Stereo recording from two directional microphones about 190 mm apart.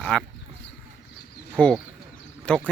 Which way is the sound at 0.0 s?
5° left (ahead or behind).